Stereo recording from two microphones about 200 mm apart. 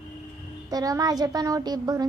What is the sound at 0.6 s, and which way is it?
A child's voice, 20° right (ahead or behind).